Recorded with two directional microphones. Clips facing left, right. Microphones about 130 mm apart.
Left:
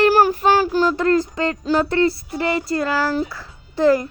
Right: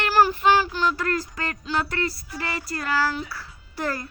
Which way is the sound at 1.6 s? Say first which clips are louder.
Left 7 dB; 40° left (ahead or behind).